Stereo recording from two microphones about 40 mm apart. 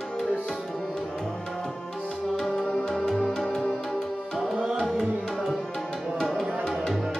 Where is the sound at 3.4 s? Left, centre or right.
Left.